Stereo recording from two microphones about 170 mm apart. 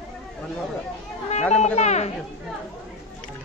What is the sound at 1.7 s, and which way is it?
Speech, 40° left (ahead or behind).